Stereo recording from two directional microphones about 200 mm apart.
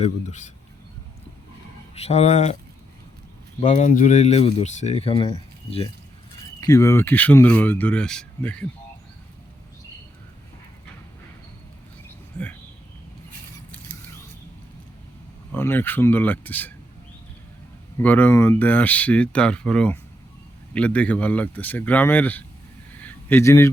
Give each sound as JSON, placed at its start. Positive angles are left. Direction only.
{"t": 0.0, "sound": "speech", "side_deg": 35}
{"t": 2.0, "sound": "speech", "side_deg": 30}
{"t": 3.6, "sound": "speech", "side_deg": 40}
{"t": 6.6, "sound": "speech", "side_deg": 15}
{"t": 12.4, "sound": "speech", "side_deg": 5}
{"t": 15.5, "sound": "speech", "side_deg": 10}
{"t": 17.9, "sound": "speech", "side_deg": 10}
{"t": 23.0, "sound": "a sound", "side_deg": 10}